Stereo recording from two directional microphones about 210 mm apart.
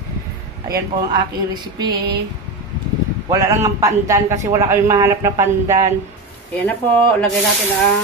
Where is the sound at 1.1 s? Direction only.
20° right (ahead or behind).